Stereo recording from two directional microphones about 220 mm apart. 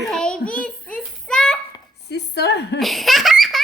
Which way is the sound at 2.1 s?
50° left (ahead or behind).